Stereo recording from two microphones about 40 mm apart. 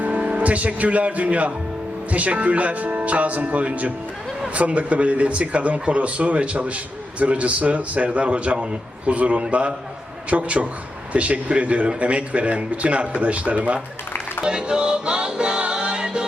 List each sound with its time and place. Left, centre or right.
0.0 s music: right
0.3 s a man's voice: right
14.4 s music: right